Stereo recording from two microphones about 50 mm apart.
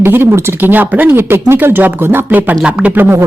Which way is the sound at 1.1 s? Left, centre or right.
Right.